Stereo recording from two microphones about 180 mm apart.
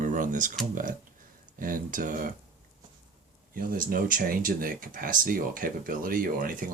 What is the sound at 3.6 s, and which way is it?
Speech, 50° right (ahead or behind).